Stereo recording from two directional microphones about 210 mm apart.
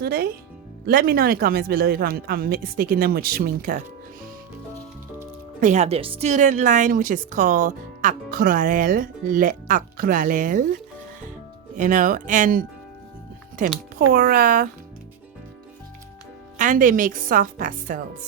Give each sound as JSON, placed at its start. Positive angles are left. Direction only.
{"t": 0.0, "sound": "speech", "side_deg": -45}
{"t": 5.5, "sound": "a woman's voice", "side_deg": -35}
{"t": 11.7, "sound": "a woman's voice", "side_deg": -35}
{"t": 14.1, "sound": "speech", "side_deg": -45}
{"t": 16.6, "sound": "a woman's voice", "side_deg": -40}